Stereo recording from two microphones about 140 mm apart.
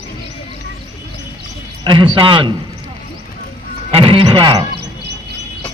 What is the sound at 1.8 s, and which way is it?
Speech, 35° right (ahead or behind).